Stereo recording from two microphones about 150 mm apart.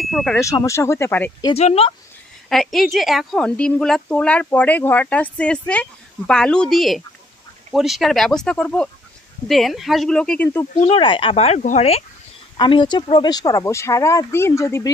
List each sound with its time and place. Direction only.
0.0 s speech: centre (ahead or behind)
0.4 s speech: 20° left (ahead or behind)
1.5 s speech: 45° left (ahead or behind)
2.5 s a woman's voice: centre (ahead or behind)
10.8 s speech: 35° left (ahead or behind)
12.5 s speech: 30° left (ahead or behind)